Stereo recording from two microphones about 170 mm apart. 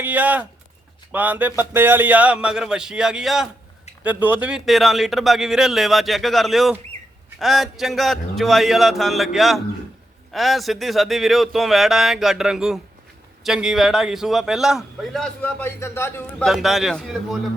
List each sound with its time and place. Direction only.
0.0 s a sound: 10° right (ahead or behind)
1.1 s a man's voice: 10° right (ahead or behind); by 16.2 s 15° left (ahead or behind)
16.4 s a man's voice: centre (ahead or behind)